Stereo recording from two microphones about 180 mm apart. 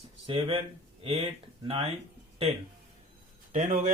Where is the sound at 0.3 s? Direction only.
30° right (ahead or behind).